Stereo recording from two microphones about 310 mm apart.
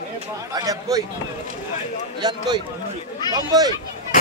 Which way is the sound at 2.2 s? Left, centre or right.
Centre.